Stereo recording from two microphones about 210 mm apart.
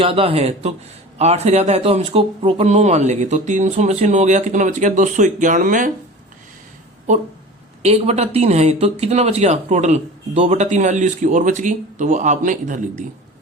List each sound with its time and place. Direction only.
0.0 s speech: 25° right (ahead or behind)
7.8 s speech: 30° right (ahead or behind)